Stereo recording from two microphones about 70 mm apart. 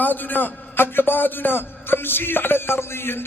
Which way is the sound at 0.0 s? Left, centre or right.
Left.